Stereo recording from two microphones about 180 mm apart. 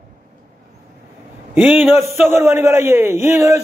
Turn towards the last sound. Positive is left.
turn(degrees=-15)  # may be behind; listen again after turning